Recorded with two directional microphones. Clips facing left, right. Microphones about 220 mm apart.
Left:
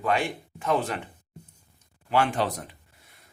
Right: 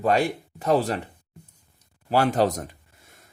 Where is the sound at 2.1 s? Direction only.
40° right (ahead or behind).